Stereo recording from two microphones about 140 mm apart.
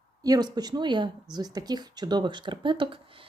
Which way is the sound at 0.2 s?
30° right (ahead or behind).